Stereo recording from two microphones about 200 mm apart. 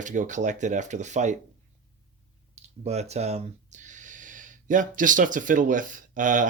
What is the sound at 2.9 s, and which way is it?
Speech, 35° right (ahead or behind).